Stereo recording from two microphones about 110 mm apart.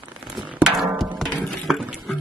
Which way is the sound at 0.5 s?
5° right (ahead or behind).